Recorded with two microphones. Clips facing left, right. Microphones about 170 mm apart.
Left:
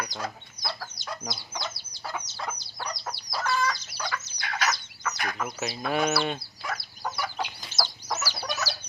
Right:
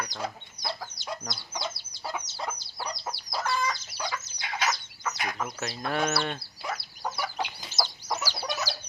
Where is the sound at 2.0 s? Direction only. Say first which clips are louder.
Even; 10° right (ahead or behind).